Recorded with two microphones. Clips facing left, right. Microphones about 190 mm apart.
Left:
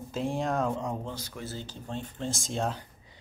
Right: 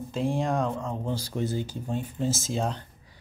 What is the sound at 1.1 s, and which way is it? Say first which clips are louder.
Speech: right 10 dB; 30° right (ahead or behind).